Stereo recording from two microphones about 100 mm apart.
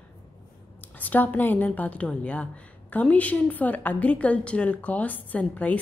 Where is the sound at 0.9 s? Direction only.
15° left (ahead or behind).